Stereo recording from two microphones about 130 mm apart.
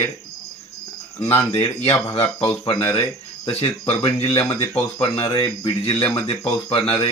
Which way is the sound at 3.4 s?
45° left (ahead or behind).